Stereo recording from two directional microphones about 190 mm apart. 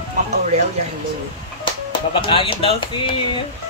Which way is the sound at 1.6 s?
25° left (ahead or behind).